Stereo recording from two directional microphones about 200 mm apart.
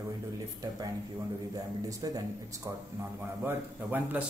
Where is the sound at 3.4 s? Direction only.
10° right (ahead or behind).